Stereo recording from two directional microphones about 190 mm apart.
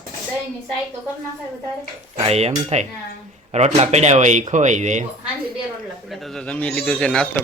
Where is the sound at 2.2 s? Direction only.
35° right (ahead or behind).